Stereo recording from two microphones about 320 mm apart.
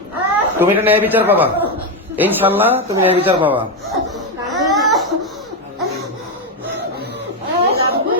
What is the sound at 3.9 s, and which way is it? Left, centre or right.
Laughter, centre.